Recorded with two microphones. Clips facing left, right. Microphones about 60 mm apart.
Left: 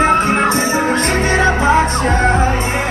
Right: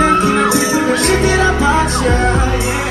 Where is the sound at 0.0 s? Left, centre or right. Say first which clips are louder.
Right 1 dB; left.